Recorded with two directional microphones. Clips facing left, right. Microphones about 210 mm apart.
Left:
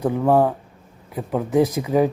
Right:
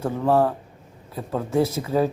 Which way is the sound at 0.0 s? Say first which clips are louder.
Left 3 dB; 15° left (ahead or behind).